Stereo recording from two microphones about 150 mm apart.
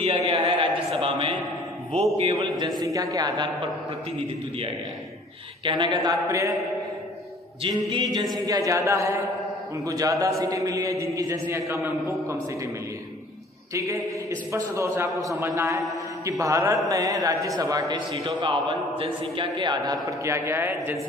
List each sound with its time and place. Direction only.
0.0 s a sound: 40° right (ahead or behind)
2.1 s a man's voice: 45° right (ahead or behind)
2.8 s a man's voice: 25° right (ahead or behind)
5.6 s speech: 35° right (ahead or behind)
6.0 s a man's voice: 20° right (ahead or behind)
7.6 s a man's voice: 30° right (ahead or behind)
13.7 s a man's voice: 20° right (ahead or behind)